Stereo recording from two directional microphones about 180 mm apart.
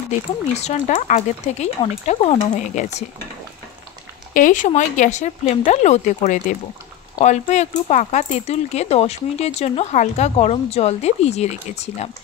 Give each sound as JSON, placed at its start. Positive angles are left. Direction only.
{"t": 0.6, "sound": "speech", "side_deg": 40}
{"t": 4.3, "sound": "speech", "side_deg": 45}
{"t": 7.2, "sound": "speech", "side_deg": 40}